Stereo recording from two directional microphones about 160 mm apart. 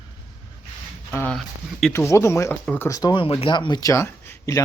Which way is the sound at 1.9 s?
15° left (ahead or behind).